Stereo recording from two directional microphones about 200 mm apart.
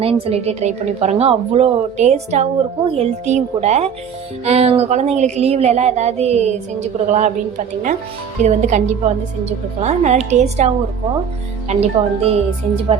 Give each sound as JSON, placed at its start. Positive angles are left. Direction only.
{"t": 0.0, "sound": "a woman's voice", "side_deg": -30}
{"t": 8.4, "sound": "a woman's voice", "side_deg": -35}
{"t": 11.7, "sound": "a woman's voice", "side_deg": -30}